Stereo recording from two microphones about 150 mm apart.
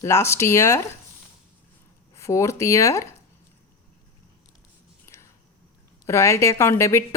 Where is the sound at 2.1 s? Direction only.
20° left (ahead or behind).